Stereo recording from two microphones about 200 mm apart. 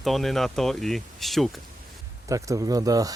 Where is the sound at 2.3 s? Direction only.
15° right (ahead or behind).